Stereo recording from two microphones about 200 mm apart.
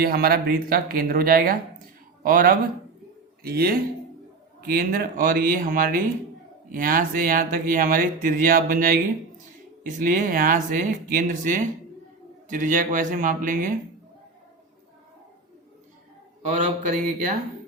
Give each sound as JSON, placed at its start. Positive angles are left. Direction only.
{"t": 0.0, "sound": "speech", "side_deg": -50}
{"t": 16.4, "sound": "speech", "side_deg": -35}